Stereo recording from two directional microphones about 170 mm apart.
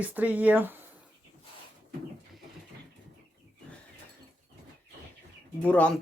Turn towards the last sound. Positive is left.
turn(degrees=10)  # may be behind; listen again after turning